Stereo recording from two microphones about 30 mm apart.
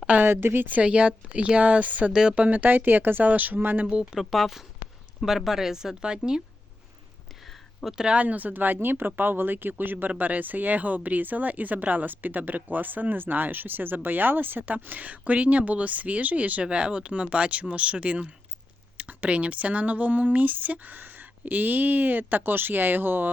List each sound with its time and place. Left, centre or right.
0.1 s speech: right
0.8 s speech: right
2.5 s speech: right
4.2 s speech: centre
5.2 s speech: centre
8.1 s speech: right
10.2 s speech: right
16.6 s speech: right
20.3 s speech: right